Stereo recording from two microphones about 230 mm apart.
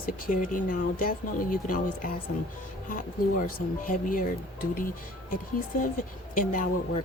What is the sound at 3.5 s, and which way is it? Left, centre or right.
Speech, left.